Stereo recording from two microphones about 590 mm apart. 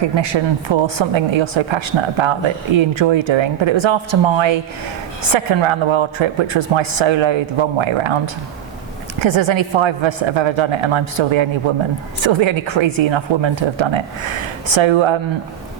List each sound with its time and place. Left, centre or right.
0.2 s a woman's voice: right